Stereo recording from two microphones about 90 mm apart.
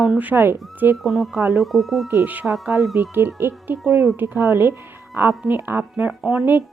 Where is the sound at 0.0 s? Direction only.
15° right (ahead or behind).